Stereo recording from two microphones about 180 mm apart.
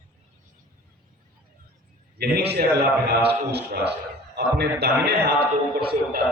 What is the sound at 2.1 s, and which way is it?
A man's voice, 65° right (ahead or behind).